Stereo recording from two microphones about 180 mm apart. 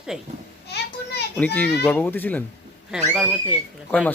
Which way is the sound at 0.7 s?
65° left (ahead or behind).